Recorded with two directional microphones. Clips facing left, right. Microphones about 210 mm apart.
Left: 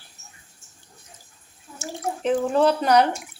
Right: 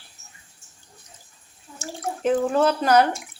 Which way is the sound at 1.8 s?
Centre (ahead or behind).